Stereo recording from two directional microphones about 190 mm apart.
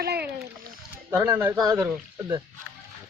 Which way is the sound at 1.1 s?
10° right (ahead or behind).